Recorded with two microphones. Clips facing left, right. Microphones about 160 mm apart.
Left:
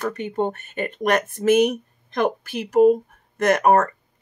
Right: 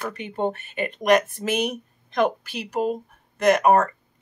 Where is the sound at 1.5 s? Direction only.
45° left (ahead or behind).